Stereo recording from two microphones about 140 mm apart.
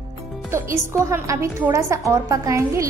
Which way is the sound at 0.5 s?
20° right (ahead or behind).